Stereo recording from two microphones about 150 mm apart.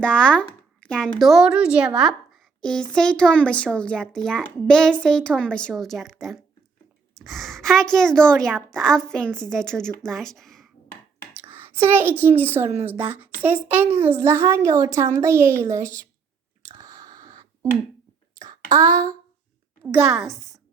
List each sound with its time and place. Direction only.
0.0 s a woman's voice: 5° left (ahead or behind)
2.6 s a child's voice: 5° left (ahead or behind)
11.3 s a woman's voice: 15° right (ahead or behind)
16.7 s a sound: 25° right (ahead or behind)
18.7 s a woman's voice: 25° right (ahead or behind)
19.8 s a woman's voice: 10° right (ahead or behind)